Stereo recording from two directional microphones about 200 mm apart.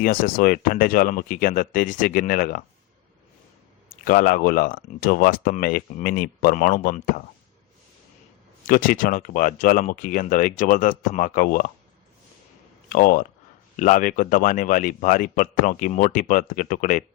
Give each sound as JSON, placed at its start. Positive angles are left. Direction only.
{"t": 0.0, "sound": "speech", "side_deg": 45}
{"t": 3.8, "sound": "speech", "side_deg": 45}
{"t": 8.6, "sound": "speech", "side_deg": 45}
{"t": 12.9, "sound": "speech", "side_deg": 45}